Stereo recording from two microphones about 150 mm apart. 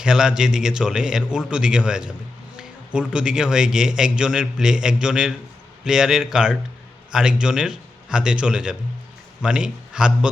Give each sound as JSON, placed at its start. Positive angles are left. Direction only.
{"t": 0.0, "sound": "a man's voice", "side_deg": -5}